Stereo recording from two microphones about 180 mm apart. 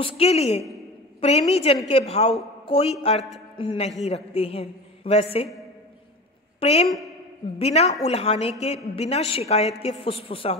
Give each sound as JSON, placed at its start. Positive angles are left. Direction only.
{"t": 0.0, "sound": "a woman's voice", "side_deg": 35}
{"t": 6.6, "sound": "a woman's voice", "side_deg": 35}